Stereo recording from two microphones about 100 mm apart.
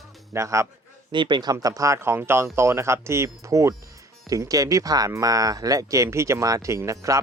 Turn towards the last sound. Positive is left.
turn(degrees=-30)  # may be behind; listen again after turning